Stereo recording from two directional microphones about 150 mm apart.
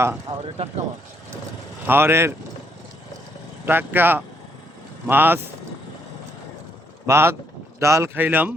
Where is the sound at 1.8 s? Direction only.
15° right (ahead or behind).